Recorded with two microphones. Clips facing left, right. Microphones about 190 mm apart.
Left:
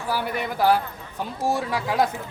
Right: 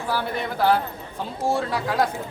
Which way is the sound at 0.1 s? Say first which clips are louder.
Even; 10° left (ahead or behind).